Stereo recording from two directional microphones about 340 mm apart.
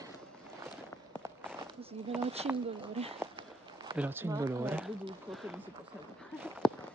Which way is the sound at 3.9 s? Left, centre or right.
Centre.